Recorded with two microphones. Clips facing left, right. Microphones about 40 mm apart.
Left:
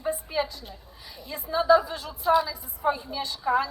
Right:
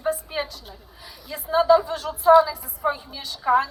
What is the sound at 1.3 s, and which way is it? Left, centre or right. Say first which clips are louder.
Speech: right 6 dB; right.